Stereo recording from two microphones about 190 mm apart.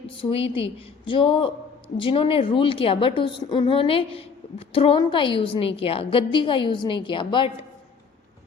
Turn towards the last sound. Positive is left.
turn(degrees=25)  # may be behind; listen again after turning